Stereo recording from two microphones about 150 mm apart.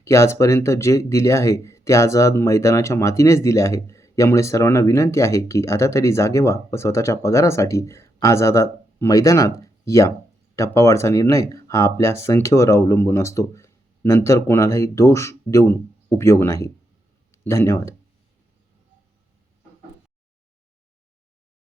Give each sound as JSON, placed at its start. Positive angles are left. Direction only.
{"t": 0.0, "sound": "speech", "side_deg": 20}